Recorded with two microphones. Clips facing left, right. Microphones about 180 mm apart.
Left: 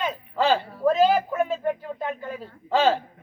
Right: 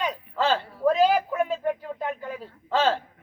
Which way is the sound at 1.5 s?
Centre (ahead or behind).